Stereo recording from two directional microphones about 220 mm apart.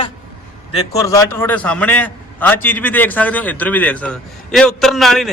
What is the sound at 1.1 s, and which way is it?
A man's voice, 10° left (ahead or behind).